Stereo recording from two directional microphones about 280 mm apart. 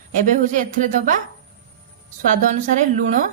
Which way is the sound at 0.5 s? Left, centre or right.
Right.